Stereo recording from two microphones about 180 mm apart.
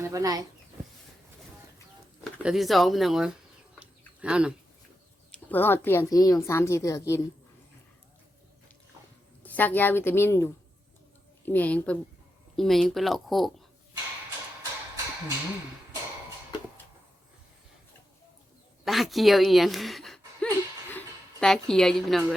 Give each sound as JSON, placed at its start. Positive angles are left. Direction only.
{"t": 0.0, "sound": "speech", "side_deg": -20}
{"t": 2.4, "sound": "speech", "side_deg": 0}
{"t": 3.8, "sound": "a sound", "side_deg": -5}
{"t": 5.3, "sound": "a woman's voice", "side_deg": 10}
{"t": 9.4, "sound": "a woman's voice", "side_deg": 10}
{"t": 18.9, "sound": "speech", "side_deg": 0}